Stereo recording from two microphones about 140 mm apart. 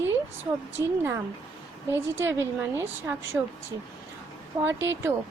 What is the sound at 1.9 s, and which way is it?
A woman's voice, 15° right (ahead or behind).